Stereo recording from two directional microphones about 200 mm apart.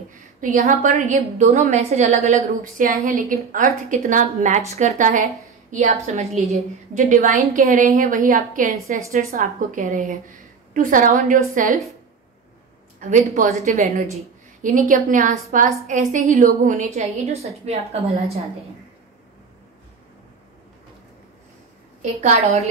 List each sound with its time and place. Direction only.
0.4 s a woman's voice: 40° right (ahead or behind)
13.0 s a woman's voice: 40° right (ahead or behind)
22.2 s a woman's voice: 35° right (ahead or behind)